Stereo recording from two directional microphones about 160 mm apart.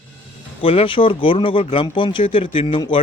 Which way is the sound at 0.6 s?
35° left (ahead or behind).